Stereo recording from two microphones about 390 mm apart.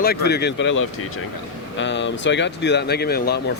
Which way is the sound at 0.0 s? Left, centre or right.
Left.